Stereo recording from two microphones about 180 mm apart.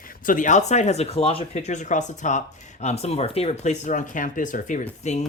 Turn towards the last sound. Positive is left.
turn(degrees=40)  # may be behind; listen again after turning